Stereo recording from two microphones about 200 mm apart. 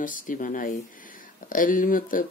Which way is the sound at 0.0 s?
40° left (ahead or behind).